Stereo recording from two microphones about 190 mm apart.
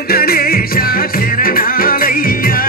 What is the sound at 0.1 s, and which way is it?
Music, 55° left (ahead or behind).